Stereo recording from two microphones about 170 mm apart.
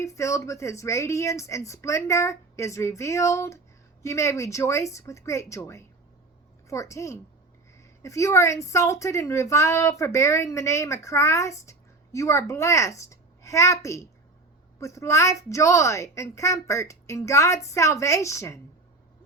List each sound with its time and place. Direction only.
0.0 s speech: 20° left (ahead or behind)